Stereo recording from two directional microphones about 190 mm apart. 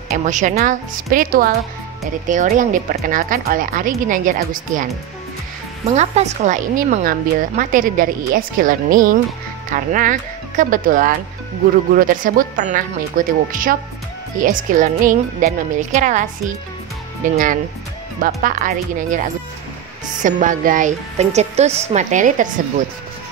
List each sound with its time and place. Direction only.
0.1 s a woman's voice: 40° right (ahead or behind)
5.9 s a woman's voice: 35° right (ahead or behind)